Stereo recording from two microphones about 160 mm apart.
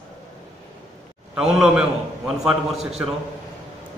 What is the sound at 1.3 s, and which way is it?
A man's voice, 5° right (ahead or behind).